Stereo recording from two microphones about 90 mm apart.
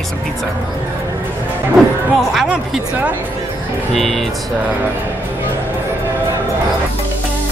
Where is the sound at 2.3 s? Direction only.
5° right (ahead or behind).